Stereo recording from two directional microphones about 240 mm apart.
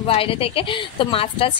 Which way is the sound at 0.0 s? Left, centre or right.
Left.